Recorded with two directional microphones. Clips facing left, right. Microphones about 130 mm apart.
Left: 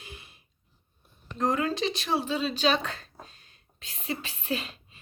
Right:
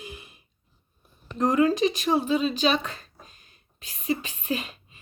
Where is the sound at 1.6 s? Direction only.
5° right (ahead or behind).